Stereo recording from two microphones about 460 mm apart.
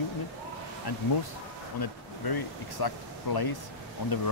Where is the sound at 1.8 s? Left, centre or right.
Left.